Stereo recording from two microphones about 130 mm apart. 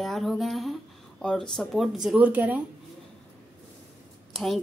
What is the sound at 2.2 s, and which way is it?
Speech, 15° right (ahead or behind).